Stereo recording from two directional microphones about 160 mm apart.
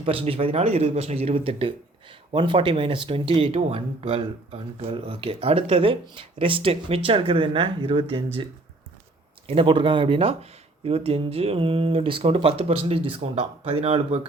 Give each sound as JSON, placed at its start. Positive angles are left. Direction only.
{"t": 0.0, "sound": "speech", "side_deg": -35}
{"t": 9.5, "sound": "speech", "side_deg": -35}